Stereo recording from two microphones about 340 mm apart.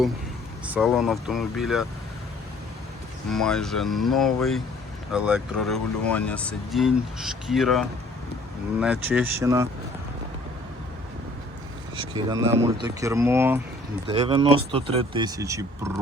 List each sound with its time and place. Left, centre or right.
0.7 s speech: centre
3.2 s speech: centre
11.9 s speech: centre